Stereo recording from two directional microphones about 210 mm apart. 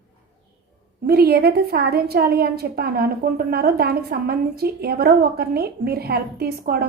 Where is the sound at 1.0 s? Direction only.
45° right (ahead or behind).